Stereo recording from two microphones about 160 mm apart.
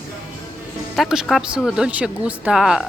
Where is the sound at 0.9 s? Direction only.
Centre (ahead or behind).